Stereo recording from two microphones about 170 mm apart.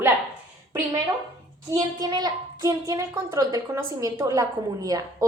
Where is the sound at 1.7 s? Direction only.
25° right (ahead or behind).